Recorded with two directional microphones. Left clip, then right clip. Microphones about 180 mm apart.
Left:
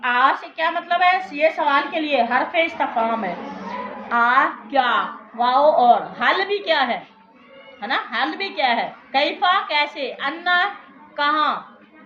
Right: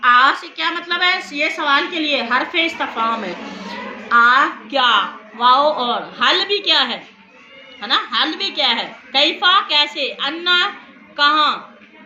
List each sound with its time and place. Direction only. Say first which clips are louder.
0.0 s a woman's voice: right 5 dB; 50° left (ahead or behind)